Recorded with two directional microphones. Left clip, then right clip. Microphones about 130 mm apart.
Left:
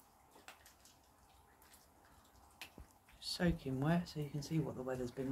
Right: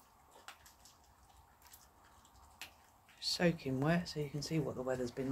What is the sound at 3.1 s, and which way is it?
Speech, 30° right (ahead or behind).